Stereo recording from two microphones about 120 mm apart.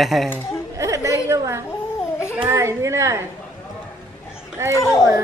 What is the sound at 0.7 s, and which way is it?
Chatter, 25° right (ahead or behind).